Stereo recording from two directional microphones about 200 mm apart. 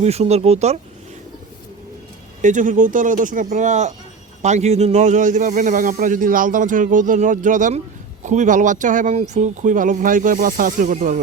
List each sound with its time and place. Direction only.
0.0 s speech: 30° right (ahead or behind)
2.4 s speech: 40° right (ahead or behind)